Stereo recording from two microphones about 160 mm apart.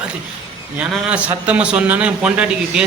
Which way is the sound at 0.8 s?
5° right (ahead or behind).